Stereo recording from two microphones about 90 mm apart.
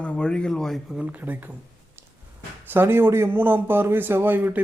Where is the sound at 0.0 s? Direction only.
10° left (ahead or behind).